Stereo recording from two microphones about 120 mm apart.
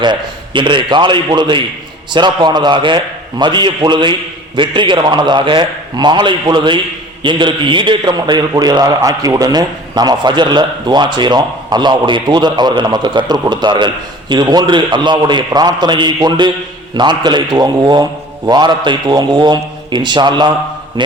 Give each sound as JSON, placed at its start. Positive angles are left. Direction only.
{"t": 0.0, "sound": "a man's voice", "side_deg": -40}